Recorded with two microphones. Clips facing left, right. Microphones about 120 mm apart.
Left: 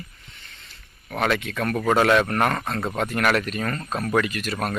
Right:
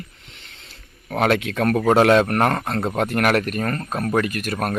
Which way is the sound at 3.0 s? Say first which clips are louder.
Right 3 dB; 55° right (ahead or behind).